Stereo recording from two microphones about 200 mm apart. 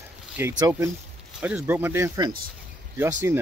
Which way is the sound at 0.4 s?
15° right (ahead or behind).